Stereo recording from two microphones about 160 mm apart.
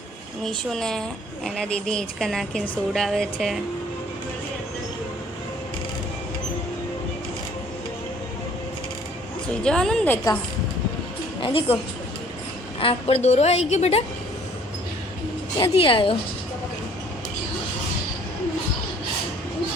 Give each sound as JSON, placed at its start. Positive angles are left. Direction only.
{"t": 0.4, "sound": "a woman's voice", "side_deg": 5}
{"t": 9.5, "sound": "a woman's voice", "side_deg": 5}
{"t": 11.3, "sound": "a woman's voice", "side_deg": 35}
{"t": 12.8, "sound": "a woman's voice", "side_deg": 40}
{"t": 15.5, "sound": "a woman's voice", "side_deg": 30}